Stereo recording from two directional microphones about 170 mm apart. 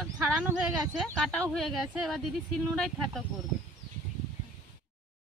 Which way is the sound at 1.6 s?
Centre (ahead or behind).